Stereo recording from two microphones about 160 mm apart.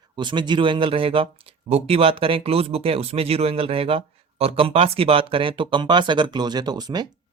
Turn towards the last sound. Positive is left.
turn(degrees=-25)  # may be behind; listen again after turning